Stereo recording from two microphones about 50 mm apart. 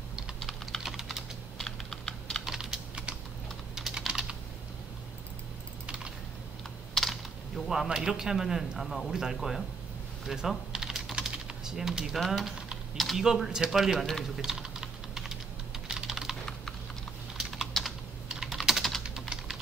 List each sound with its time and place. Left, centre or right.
0.5 s typing: centre
1.6 s computer keyboard: centre
2.4 s typing: centre
6.9 s typing: centre
7.9 s a man's voice: centre
10.2 s typing: centre
12.3 s speech: centre
12.9 s typing: centre
13.2 s a man's voice: centre
14.4 s typing: centre
17.5 s typing: centre
19.0 s typing: centre